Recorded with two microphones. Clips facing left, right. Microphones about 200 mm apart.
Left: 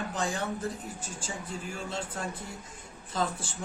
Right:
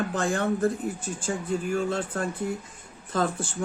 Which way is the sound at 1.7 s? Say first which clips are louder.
Right 8 dB; 55° right (ahead or behind).